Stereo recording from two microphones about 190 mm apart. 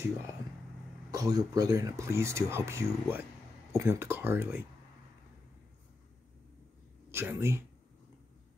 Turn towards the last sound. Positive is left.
turn(degrees=-15)  # may be behind; listen again after turning